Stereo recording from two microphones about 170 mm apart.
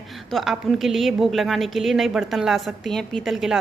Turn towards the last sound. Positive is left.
turn(degrees=0)  # may be behind; listen again after turning